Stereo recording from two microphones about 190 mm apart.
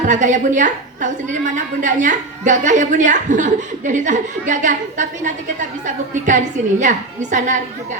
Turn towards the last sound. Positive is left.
turn(degrees=-40)  # may be behind; listen again after turning